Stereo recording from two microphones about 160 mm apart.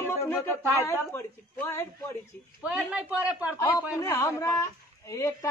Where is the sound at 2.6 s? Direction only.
5° right (ahead or behind).